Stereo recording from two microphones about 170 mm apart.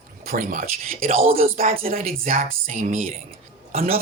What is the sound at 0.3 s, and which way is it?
Speech, 55° right (ahead or behind).